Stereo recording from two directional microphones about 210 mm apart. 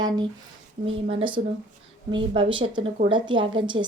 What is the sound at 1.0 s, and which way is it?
A woman's voice, 25° right (ahead or behind).